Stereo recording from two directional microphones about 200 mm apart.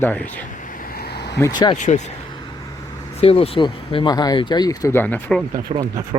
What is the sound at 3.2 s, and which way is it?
Speech, 30° left (ahead or behind).